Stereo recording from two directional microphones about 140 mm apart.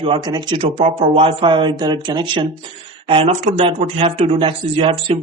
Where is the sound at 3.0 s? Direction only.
45° right (ahead or behind).